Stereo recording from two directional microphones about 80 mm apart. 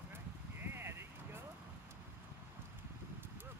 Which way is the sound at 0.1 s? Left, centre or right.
Right.